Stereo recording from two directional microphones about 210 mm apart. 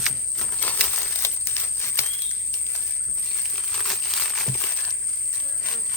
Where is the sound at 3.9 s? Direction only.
Centre (ahead or behind).